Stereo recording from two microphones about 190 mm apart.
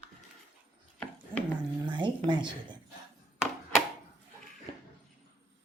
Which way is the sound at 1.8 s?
25° right (ahead or behind).